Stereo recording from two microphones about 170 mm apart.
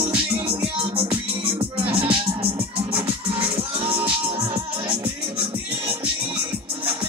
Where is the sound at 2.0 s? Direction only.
30° right (ahead or behind).